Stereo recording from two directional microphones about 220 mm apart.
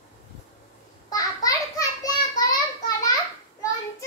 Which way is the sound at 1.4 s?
15° left (ahead or behind).